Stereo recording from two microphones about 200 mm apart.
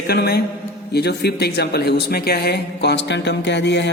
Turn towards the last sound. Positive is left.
turn(degrees=60)  # may be behind; listen again after turning